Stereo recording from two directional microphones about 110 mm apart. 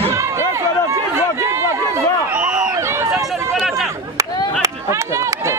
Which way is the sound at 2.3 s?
10° right (ahead or behind).